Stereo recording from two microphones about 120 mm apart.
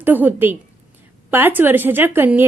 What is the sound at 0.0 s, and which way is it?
A woman's voice, 15° right (ahead or behind).